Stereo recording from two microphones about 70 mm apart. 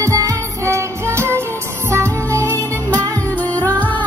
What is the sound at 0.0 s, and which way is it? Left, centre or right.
Music, right.